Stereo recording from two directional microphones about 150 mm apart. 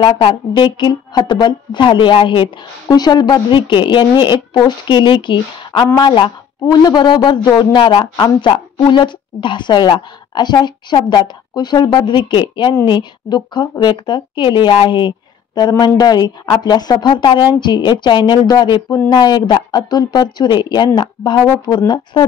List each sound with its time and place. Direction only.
0.0 s a woman's voice: 35° left (ahead or behind)